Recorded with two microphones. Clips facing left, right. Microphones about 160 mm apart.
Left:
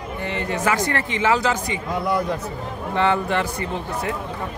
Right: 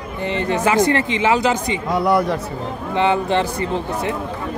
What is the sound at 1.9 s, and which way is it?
Speech, 70° right (ahead or behind).